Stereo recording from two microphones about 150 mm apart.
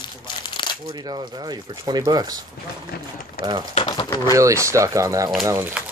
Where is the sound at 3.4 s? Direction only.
85° left.